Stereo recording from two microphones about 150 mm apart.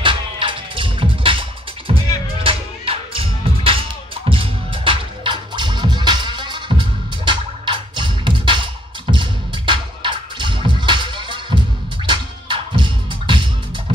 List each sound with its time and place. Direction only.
0.0 s music: 35° right (ahead or behind)